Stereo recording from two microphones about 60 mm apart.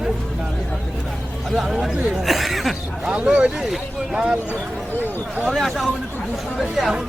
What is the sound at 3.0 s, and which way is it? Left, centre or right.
Speech, centre.